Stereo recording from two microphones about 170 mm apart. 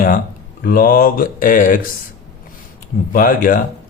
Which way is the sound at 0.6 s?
60° left (ahead or behind).